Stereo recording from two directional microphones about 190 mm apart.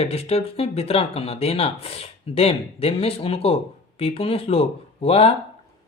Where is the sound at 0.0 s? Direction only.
30° left (ahead or behind).